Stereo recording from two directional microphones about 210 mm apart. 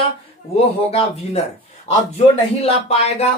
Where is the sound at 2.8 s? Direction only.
30° left (ahead or behind).